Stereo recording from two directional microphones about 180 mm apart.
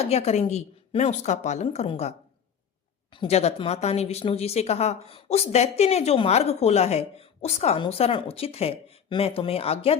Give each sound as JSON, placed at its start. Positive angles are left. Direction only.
{"t": 0.0, "sound": "speech", "side_deg": 35}